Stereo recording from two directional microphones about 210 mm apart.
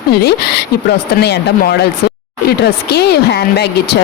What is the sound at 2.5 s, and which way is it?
Speech, 50° left (ahead or behind).